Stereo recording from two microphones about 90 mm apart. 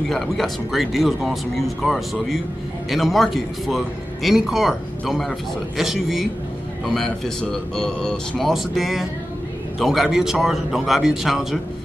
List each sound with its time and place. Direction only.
0.1 s a man's voice: centre (ahead or behind)